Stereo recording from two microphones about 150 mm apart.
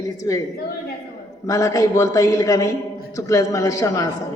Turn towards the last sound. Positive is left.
turn(degrees=20)  # may be behind; listen again after turning